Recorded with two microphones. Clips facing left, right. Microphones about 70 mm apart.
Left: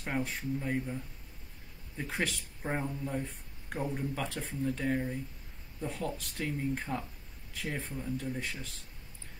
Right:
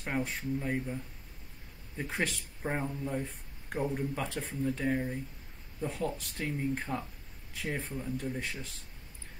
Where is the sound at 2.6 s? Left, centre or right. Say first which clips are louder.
Right 1 dB; centre.